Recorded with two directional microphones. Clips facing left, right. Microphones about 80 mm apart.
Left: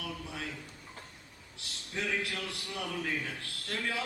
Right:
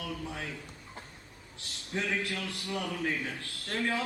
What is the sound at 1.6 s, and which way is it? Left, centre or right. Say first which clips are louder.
A man's voice: right 2 dB; right.